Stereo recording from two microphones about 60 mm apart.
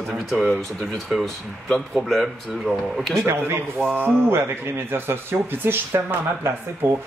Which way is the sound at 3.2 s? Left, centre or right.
Right.